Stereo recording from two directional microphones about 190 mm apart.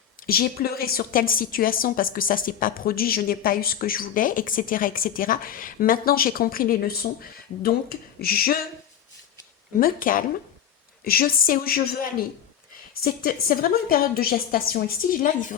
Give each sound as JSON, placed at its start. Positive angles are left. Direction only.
{"t": 0.3, "sound": "a woman's voice", "side_deg": 50}
{"t": 9.8, "sound": "a woman's voice", "side_deg": 45}